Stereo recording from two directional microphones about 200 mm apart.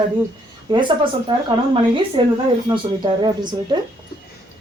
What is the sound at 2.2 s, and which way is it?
Speech, 25° right (ahead or behind).